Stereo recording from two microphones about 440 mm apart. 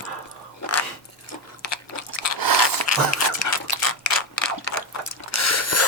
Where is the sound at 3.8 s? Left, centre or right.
Left.